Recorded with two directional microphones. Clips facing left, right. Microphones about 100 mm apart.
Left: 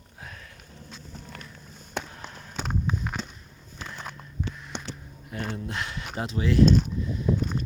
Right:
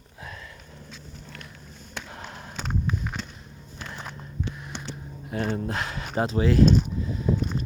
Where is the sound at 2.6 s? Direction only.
10° left (ahead or behind).